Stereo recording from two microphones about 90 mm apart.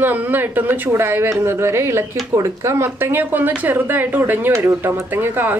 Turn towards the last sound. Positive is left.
turn(degrees=-25)  # may be behind; listen again after turning